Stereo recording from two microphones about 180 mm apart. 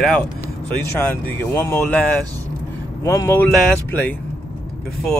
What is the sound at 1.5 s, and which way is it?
Speech, 15° left (ahead or behind).